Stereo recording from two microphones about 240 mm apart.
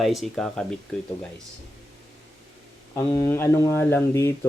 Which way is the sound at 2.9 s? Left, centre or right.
Centre.